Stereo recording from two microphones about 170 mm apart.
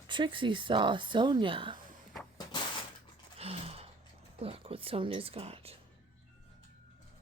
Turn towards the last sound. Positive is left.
turn(degrees=-35)  # may be behind; listen again after turning